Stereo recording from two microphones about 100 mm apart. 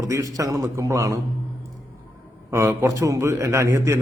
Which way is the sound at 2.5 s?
25° right (ahead or behind).